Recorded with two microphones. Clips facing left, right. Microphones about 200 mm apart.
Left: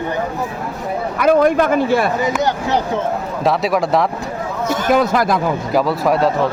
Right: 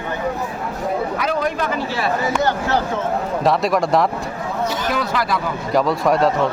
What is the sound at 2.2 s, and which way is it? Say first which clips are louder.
Speech: left 1 dB; 15° left (ahead or behind).